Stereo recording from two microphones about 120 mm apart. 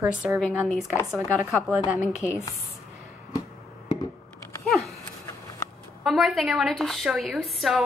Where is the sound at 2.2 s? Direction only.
25° left (ahead or behind).